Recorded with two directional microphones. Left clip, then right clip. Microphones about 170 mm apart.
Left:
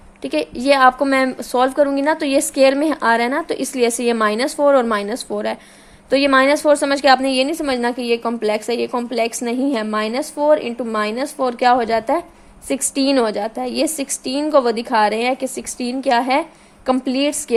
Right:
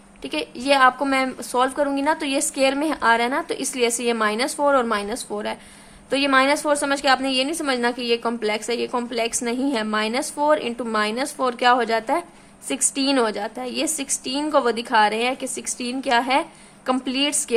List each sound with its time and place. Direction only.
0.2 s a woman's voice: 30° left (ahead or behind)